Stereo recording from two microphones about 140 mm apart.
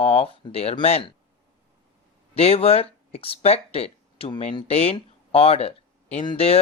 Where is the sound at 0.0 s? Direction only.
45° left (ahead or behind).